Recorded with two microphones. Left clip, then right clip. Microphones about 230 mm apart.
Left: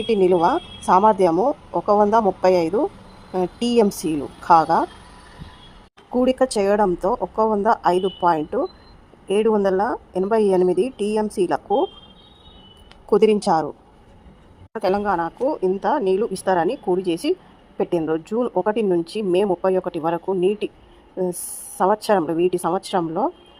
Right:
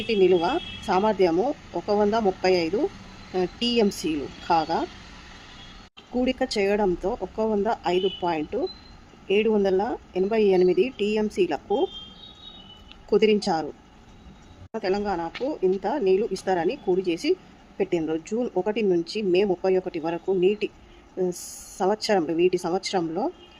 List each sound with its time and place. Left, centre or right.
0.1 s a woman's voice: left
6.1 s a woman's voice: left
13.1 s speech: centre
14.8 s a woman's voice: left
21.8 s a woman's voice: centre